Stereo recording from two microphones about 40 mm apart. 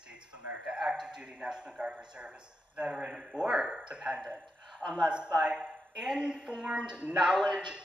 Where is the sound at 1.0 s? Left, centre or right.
Right.